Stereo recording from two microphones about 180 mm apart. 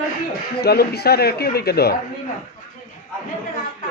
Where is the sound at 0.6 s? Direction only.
60° left (ahead or behind).